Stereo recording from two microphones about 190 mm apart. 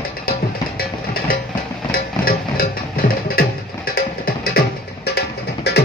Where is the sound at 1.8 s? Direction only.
50° left (ahead or behind).